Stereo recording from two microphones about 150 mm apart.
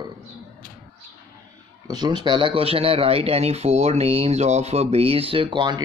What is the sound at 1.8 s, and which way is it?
Speech, 30° right (ahead or behind).